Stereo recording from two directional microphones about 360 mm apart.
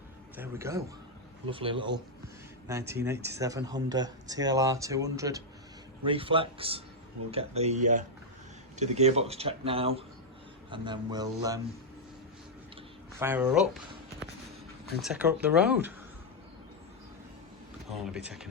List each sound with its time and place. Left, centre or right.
0.3 s speech: centre
8.8 s speech: centre
12.7 s a sound: centre
15.0 s speech: centre
18.0 s speech: centre